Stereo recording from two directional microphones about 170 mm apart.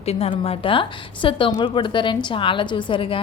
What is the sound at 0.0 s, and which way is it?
A woman's voice, 35° left (ahead or behind).